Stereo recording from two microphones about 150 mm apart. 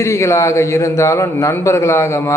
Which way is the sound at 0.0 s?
20° left (ahead or behind).